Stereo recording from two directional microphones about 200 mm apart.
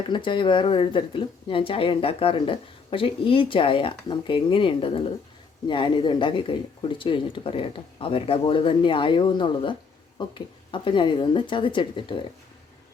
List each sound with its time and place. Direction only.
0.1 s speech: 25° left (ahead or behind)